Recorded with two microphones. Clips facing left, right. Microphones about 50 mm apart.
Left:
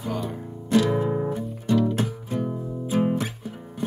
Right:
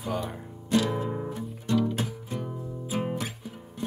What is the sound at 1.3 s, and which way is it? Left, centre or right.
Music, centre.